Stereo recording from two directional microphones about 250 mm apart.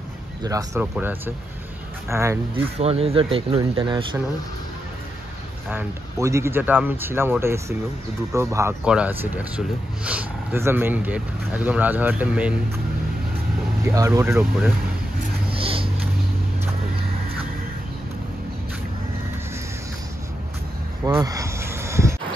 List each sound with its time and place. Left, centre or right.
0.4 s speech: centre
2.8 s speech: right
5.7 s speech: centre
13.8 s speech: centre
15.6 s vehicle: right
21.0 s a sound: centre